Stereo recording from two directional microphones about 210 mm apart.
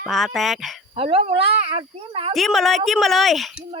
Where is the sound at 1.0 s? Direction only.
30° right (ahead or behind).